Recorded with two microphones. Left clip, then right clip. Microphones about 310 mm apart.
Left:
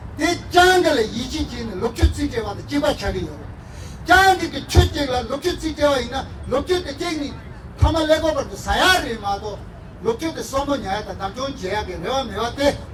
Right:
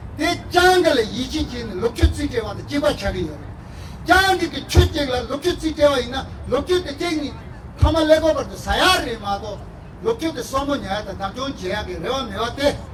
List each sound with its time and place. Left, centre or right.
0.2 s speech: left
4.3 s speech: centre